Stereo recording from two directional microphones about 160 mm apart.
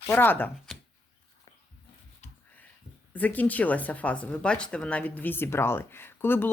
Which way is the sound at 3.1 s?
10° left (ahead or behind).